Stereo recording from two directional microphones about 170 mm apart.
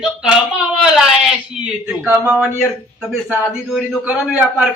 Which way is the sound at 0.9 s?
5° right (ahead or behind).